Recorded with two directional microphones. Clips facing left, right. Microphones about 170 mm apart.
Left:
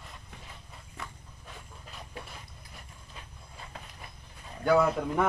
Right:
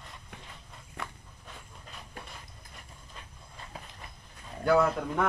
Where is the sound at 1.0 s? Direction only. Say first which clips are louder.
Right 3 dB; 60° right (ahead or behind).